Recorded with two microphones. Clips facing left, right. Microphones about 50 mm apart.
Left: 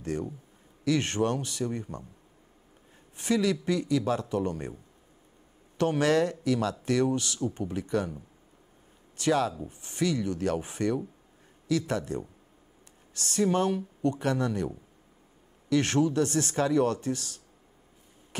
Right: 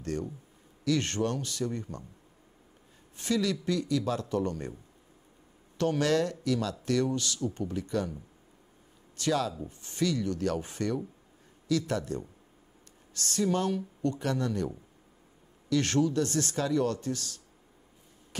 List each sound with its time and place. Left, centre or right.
0.0 s a man's voice: centre
3.2 s a man's voice: left
5.8 s a man's voice: left
9.2 s a man's voice: left
15.7 s a man's voice: left
16.5 s a man's voice: left